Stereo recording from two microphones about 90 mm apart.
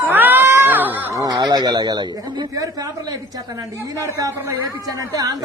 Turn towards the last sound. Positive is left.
turn(degrees=-45)  # may be behind; listen again after turning